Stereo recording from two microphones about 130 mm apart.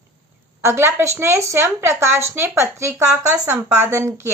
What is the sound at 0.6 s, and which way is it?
A woman's voice, 20° right (ahead or behind).